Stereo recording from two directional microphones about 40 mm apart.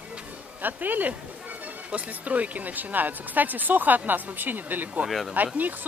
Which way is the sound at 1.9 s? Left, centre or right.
Right.